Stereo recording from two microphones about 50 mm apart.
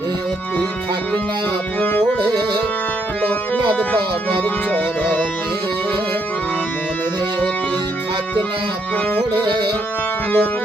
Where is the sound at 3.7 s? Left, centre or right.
Left.